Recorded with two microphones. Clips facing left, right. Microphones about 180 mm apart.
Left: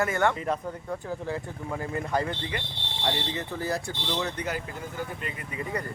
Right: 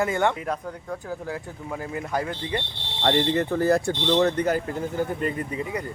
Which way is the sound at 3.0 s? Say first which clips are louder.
Right 9 dB; 60° right (ahead or behind).